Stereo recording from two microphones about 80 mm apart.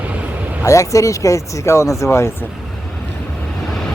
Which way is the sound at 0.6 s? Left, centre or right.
Left.